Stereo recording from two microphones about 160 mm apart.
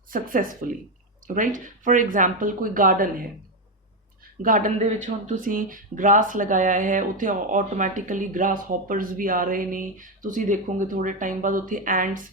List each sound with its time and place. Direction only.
0.1 s speech: 60° right (ahead or behind)
4.4 s speech: 55° right (ahead or behind)